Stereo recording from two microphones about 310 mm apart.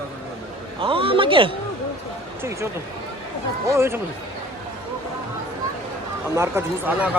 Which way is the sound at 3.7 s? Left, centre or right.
Centre.